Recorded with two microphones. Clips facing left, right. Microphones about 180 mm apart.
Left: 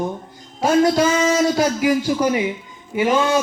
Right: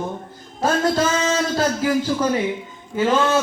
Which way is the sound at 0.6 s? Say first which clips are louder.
Left 4 dB; 10° left (ahead or behind).